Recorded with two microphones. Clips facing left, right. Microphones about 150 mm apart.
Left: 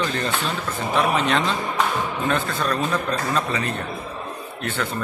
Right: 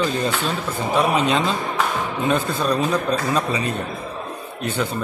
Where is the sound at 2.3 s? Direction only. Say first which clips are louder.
Right 5 dB; 15° right (ahead or behind).